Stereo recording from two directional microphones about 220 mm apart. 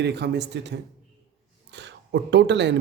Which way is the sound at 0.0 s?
50° right (ahead or behind).